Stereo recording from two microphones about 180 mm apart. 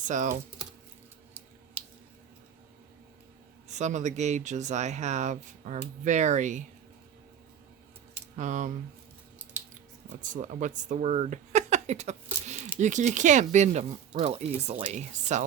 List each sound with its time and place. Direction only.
0.0 s speech: 45° right (ahead or behind)
1.8 s squish: 10° right (ahead or behind)
3.7 s speech: 40° right (ahead or behind)
8.4 s speech: 45° right (ahead or behind)
9.4 s scissors: 10° right (ahead or behind)
10.2 s speech: 45° right (ahead or behind)